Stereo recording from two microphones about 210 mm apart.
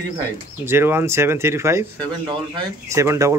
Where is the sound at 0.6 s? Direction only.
10° right (ahead or behind).